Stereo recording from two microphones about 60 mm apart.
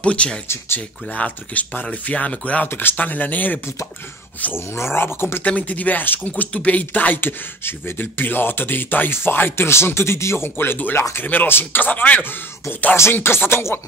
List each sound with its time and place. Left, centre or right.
0.0 s speech: centre
2.7 s speech: left
4.6 s speech: left
5.4 s speech: left
13.1 s a sound: left